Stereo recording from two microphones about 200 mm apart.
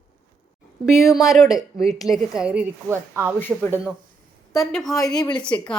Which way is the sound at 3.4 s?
10° left (ahead or behind).